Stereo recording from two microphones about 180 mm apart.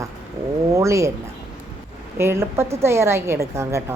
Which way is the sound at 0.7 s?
15° right (ahead or behind).